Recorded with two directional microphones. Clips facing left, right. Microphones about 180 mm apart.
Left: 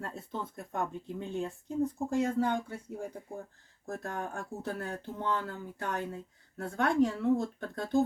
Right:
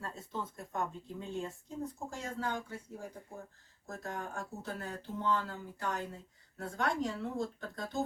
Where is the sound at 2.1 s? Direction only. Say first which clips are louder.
Left 12 dB; 60° left (ahead or behind).